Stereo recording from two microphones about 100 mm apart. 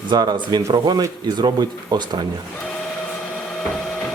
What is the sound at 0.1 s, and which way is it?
Speech, 50° right (ahead or behind).